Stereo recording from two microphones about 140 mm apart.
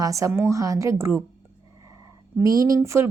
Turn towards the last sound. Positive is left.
turn(degrees=-20)  # may be behind; listen again after turning